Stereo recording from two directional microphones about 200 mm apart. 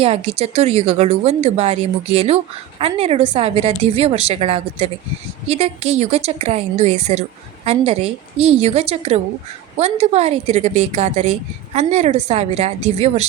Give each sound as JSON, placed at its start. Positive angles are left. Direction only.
{"t": 0.0, "sound": "speech", "side_deg": -30}